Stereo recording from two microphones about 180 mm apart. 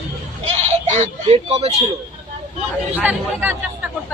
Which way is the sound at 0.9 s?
40° right (ahead or behind).